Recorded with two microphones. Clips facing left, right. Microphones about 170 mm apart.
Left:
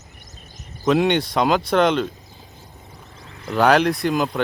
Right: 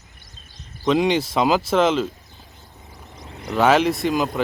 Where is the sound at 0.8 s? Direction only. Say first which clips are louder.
Left 1 dB; centre (ahead or behind).